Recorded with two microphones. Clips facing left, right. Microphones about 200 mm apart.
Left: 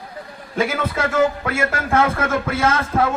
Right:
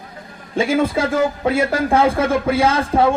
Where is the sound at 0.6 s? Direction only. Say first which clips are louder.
Right 4 dB; 30° right (ahead or behind).